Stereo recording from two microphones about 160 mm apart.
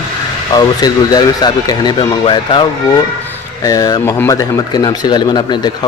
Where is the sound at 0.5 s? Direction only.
25° left (ahead or behind).